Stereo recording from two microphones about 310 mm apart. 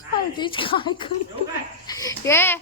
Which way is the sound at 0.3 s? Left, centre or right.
Centre.